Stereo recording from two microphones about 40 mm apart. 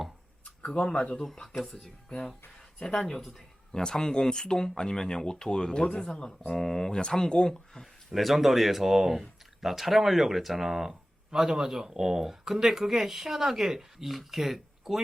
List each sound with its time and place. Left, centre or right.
0.7 s speech: centre
2.8 s speech: centre
3.2 s a sound: centre
3.8 s speech: centre
8.1 s speech: centre